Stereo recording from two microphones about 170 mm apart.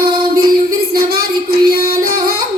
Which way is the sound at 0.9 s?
60° right (ahead or behind).